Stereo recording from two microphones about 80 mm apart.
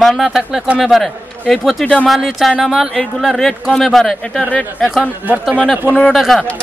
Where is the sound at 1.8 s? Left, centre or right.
Centre.